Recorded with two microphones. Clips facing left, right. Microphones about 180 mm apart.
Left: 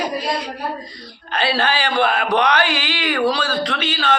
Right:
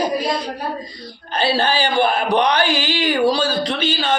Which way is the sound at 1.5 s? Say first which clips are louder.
Right 2 dB; 30° right (ahead or behind).